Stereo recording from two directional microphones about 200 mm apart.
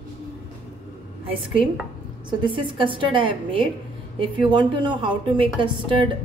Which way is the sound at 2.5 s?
25° right (ahead or behind).